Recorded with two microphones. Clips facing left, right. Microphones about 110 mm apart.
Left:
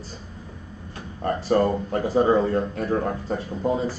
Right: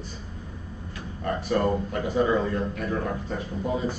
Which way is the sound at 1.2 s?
40° left (ahead or behind).